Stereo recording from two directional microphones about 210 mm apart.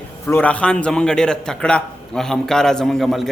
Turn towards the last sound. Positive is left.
turn(degrees=0)  # may be behind; listen again after turning